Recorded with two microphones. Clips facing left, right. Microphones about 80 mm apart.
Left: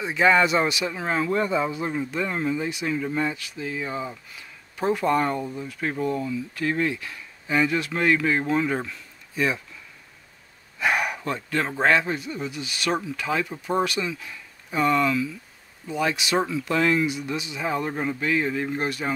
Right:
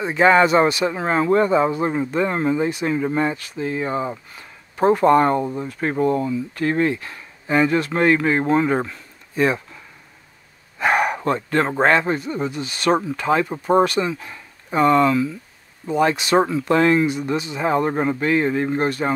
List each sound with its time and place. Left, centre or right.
0.0 s speech: right
10.8 s a sound: right
11.2 s speech: right